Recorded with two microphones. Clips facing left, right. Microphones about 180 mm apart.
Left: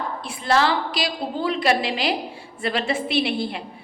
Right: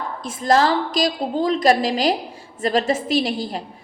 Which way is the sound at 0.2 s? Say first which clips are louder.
Right 4 dB; 45° right (ahead or behind).